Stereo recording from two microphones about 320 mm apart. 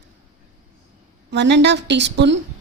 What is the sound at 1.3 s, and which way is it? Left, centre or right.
Speech, right.